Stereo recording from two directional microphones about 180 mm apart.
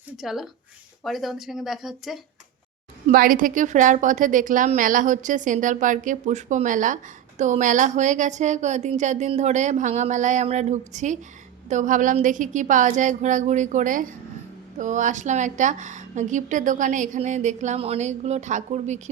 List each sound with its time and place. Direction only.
0.2 s speech: centre (ahead or behind)
3.1 s a woman's voice: 50° right (ahead or behind)